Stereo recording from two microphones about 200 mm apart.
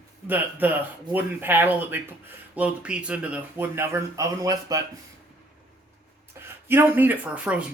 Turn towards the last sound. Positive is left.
turn(degrees=-5)  # may be behind; listen again after turning